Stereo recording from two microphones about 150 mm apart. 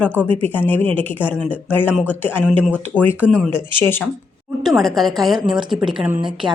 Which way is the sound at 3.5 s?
15° left (ahead or behind).